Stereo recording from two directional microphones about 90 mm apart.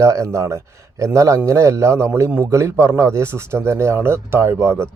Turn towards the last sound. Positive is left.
turn(degrees=-30)  # may be behind; listen again after turning